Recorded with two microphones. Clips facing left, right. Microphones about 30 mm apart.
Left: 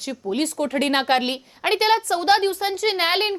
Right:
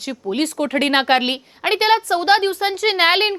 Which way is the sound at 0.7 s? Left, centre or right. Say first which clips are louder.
Right 4 dB; right.